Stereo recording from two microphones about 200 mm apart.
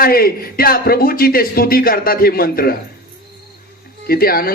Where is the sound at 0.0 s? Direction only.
50° left (ahead or behind).